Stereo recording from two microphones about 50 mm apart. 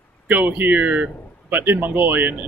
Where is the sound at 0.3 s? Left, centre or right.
Right.